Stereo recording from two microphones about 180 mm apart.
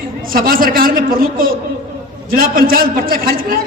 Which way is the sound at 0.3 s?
55° right (ahead or behind).